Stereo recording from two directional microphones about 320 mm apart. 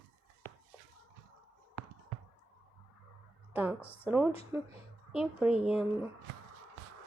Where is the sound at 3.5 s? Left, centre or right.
Centre.